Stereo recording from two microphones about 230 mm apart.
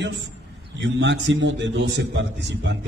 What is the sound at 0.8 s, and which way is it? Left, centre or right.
A man's voice, right.